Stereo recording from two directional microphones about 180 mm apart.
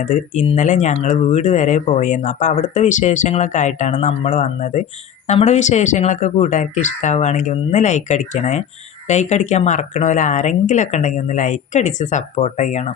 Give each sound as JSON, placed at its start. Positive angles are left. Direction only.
{"t": 0.0, "sound": "speech", "side_deg": 45}